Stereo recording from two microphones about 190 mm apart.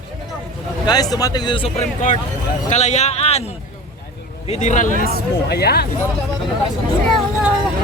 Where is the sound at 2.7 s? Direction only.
40° left (ahead or behind).